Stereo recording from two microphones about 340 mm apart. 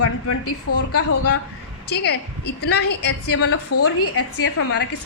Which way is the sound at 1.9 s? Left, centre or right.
Left.